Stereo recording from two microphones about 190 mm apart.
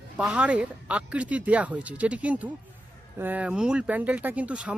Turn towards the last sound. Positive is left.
turn(degrees=-5)  # may be behind; listen again after turning